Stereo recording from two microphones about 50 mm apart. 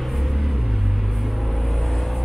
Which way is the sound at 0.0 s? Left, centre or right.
Centre.